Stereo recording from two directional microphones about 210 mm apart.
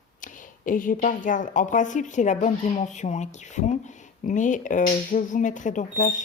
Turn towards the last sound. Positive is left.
turn(degrees=35)  # may be behind; listen again after turning